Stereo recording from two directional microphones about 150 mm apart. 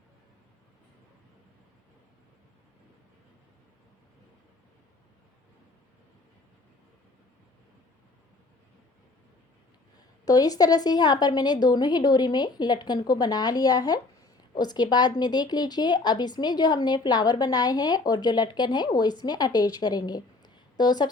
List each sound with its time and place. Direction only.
10.2 s a woman's voice: 25° left (ahead or behind)